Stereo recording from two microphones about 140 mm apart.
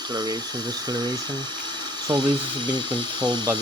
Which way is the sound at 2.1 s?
30° right (ahead or behind).